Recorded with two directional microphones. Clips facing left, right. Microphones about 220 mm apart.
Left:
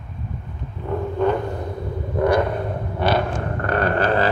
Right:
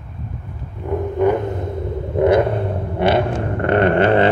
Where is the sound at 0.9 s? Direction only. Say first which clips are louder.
Right 4 dB; 15° right (ahead or behind).